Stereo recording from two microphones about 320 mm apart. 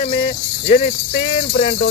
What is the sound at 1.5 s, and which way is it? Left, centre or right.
Music, left.